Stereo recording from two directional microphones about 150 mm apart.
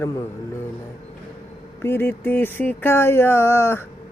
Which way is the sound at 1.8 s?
15° left (ahead or behind).